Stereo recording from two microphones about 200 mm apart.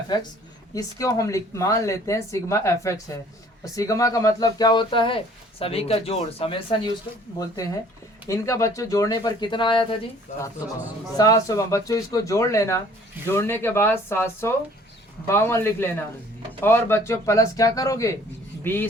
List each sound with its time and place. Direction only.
0.7 s speech: 15° left (ahead or behind)
11.2 s speech: 20° left (ahead or behind)